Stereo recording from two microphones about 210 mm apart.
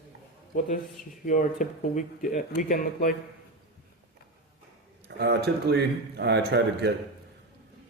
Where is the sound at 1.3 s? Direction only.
40° left (ahead or behind).